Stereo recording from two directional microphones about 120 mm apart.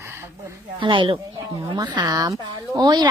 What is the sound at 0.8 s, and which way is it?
Speech, 45° right (ahead or behind).